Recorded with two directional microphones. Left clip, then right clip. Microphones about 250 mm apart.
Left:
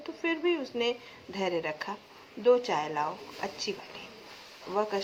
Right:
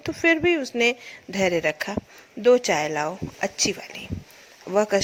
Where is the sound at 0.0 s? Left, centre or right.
Right.